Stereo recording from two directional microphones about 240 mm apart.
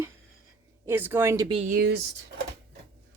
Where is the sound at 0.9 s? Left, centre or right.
Centre.